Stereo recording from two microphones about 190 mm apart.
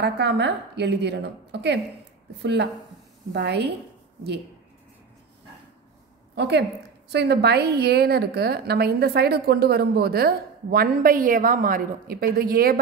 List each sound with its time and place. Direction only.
0.0 s a woman's voice: 65° right (ahead or behind)
6.3 s a woman's voice: 60° right (ahead or behind)